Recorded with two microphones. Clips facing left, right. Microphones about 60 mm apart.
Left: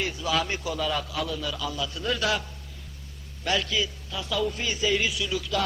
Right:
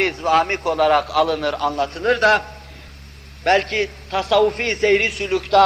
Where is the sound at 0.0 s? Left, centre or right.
Right.